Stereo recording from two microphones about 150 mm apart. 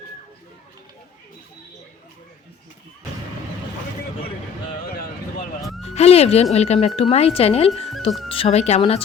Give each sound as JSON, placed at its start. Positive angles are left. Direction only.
{"t": 5.8, "sound": "speech", "side_deg": 45}